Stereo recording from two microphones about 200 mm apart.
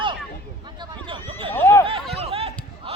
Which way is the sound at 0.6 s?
20° right (ahead or behind).